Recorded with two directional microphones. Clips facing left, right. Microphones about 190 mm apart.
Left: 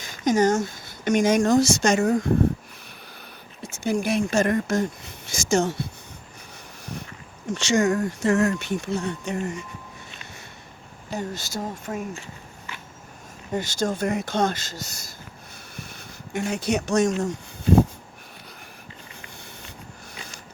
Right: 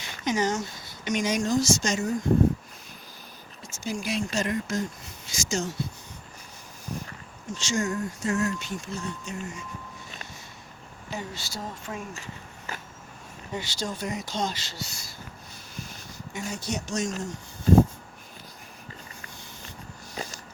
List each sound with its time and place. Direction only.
0.0 s a woman's voice: 45° left (ahead or behind); by 2.3 s 65° left (ahead or behind)
3.6 s speech: 60° left (ahead or behind)
7.5 s speech: 65° left (ahead or behind)
11.1 s speech: 45° left (ahead or behind)
13.5 s speech: 45° left (ahead or behind)
15.7 s a sound: 60° left (ahead or behind)
20.2 s a sound: 40° right (ahead or behind)